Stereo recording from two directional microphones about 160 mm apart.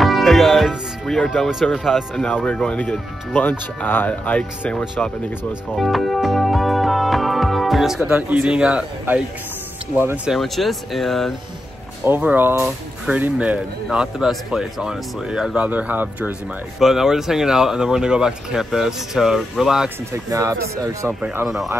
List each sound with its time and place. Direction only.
0.0 s speech: centre (ahead or behind)
12.0 s speech: 10° right (ahead or behind)
20.1 s speech: 20° right (ahead or behind)
21.1 s speech: 5° right (ahead or behind)